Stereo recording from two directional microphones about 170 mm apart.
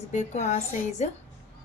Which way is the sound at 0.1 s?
45° left (ahead or behind).